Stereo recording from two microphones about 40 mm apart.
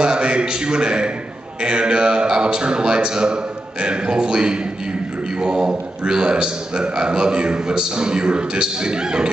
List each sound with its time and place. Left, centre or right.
0.0 s a man's voice: right